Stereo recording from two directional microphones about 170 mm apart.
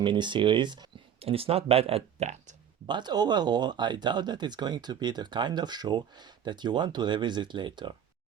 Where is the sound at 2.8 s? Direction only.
25° right (ahead or behind).